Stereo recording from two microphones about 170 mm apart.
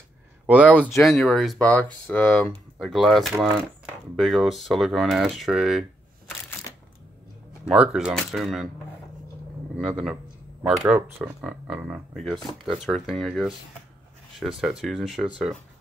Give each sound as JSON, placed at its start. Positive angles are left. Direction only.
{"t": 0.5, "sound": "speech", "side_deg": -5}
{"t": 6.7, "sound": "a sound", "side_deg": 20}
{"t": 7.6, "sound": "speech", "side_deg": -5}
{"t": 9.8, "sound": "speech", "side_deg": 0}